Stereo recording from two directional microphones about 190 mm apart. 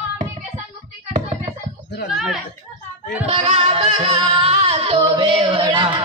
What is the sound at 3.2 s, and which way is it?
Music, 35° right (ahead or behind).